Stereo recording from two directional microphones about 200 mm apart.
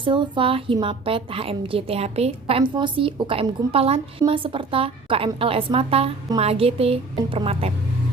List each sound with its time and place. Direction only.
0.0 s a woman's voice: 25° right (ahead or behind)